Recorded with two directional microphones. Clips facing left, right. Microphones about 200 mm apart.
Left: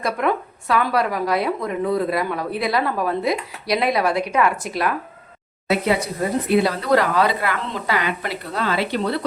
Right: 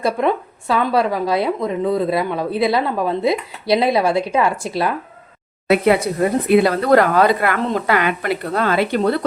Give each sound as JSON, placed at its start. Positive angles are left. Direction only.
{"t": 0.0, "sound": "a woman's voice", "side_deg": -25}
{"t": 5.6, "sound": "a woman's voice", "side_deg": -60}